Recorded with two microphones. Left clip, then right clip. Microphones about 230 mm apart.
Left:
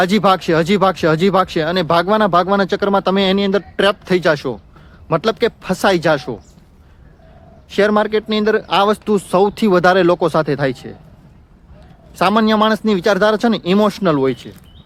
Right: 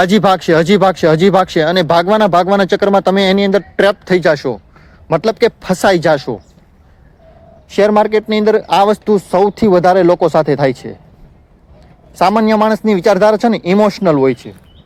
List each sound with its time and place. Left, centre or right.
0.0 s speech: centre
7.7 s speech: centre
12.1 s speech: centre